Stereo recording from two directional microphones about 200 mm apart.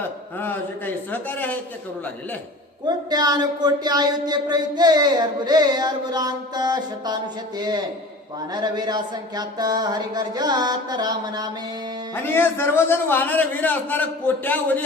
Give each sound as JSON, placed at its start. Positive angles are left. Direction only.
{"t": 0.3, "sound": "a man's voice", "side_deg": 10}
{"t": 2.8, "sound": "speech", "side_deg": -20}
{"t": 12.1, "sound": "a man's voice", "side_deg": 10}